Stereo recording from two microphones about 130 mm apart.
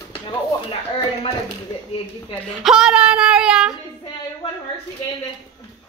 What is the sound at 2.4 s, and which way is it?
Speech, 5° right (ahead or behind).